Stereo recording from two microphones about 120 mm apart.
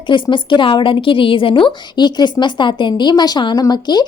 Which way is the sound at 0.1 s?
40° left (ahead or behind).